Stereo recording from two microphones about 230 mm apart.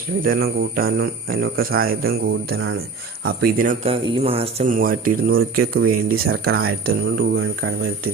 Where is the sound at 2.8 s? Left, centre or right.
Right.